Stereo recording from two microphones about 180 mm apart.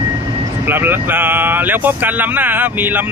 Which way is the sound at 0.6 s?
10° right (ahead or behind).